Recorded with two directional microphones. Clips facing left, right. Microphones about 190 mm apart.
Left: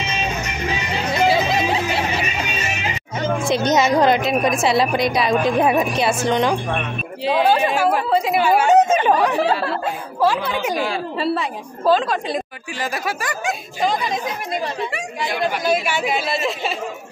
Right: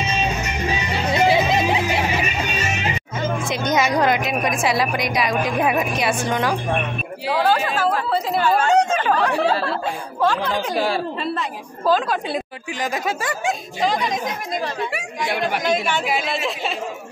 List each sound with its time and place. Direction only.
1.1 s a sound: 20° right (ahead or behind)
3.4 s a woman's voice: 30° left (ahead or behind)
9.4 s a woman's voice: centre (ahead or behind)
12.9 s speech: 25° right (ahead or behind)
15.6 s a woman's voice: 5° left (ahead or behind)